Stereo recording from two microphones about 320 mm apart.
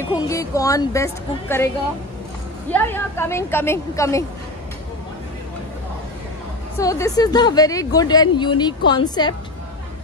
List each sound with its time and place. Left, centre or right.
0.3 s a woman's voice: centre
2.7 s a woman's voice: centre
6.8 s a woman's voice: centre